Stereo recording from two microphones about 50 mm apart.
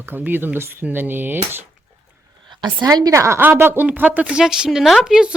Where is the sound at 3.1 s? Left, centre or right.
Right.